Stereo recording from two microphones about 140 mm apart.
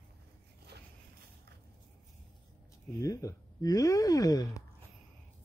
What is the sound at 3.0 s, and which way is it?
Speech, 25° left (ahead or behind).